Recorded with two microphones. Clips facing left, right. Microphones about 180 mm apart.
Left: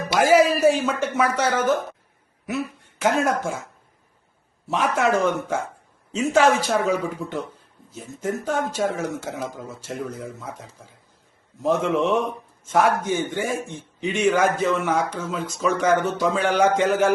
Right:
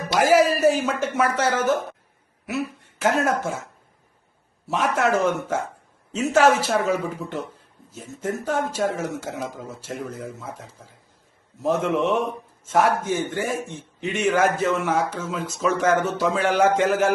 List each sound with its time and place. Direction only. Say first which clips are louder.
0.3 s speech: left 1 dB; 5° right (ahead or behind)
2.5 s a sound: even; 5° right (ahead or behind)
3.2 s speech: even; 5° right (ahead or behind)
4.7 s speech: even; centre (ahead or behind)
8.4 s speech: right 1 dB; 5° right (ahead or behind)